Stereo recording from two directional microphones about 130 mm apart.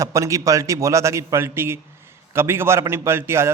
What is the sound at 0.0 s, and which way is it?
A man's voice, 25° right (ahead or behind).